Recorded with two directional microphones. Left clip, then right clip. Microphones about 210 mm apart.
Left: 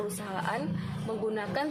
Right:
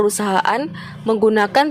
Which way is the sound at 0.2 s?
50° right (ahead or behind).